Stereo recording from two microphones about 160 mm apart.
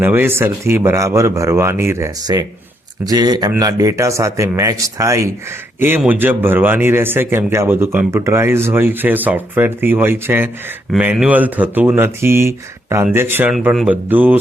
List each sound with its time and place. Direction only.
0.0 s speech: 10° right (ahead or behind)